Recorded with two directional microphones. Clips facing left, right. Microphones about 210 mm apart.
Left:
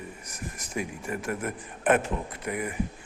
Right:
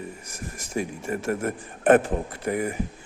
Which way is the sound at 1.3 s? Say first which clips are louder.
Right 5 dB; 45° right (ahead or behind).